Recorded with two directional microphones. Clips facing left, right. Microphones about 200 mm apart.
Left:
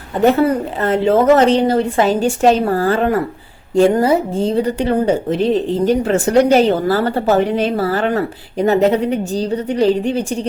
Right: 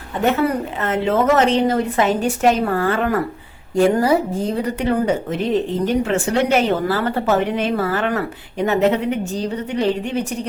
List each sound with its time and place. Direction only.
0.2 s a woman's voice: 35° left (ahead or behind)